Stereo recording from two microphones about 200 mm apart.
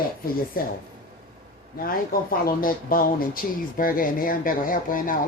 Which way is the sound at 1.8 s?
45° left (ahead or behind).